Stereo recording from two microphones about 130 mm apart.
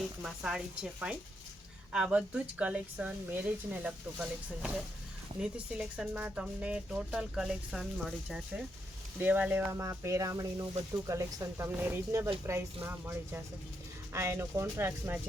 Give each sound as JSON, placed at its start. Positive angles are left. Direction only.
{"t": 0.2, "sound": "speech", "side_deg": -5}